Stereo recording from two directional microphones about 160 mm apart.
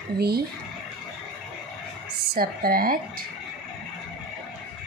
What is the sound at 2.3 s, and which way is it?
Speech, 70° right (ahead or behind).